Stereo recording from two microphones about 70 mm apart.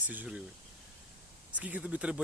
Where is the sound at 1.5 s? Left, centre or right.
Right.